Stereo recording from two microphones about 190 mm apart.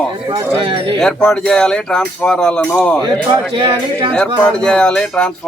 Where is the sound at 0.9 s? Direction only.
5° left (ahead or behind).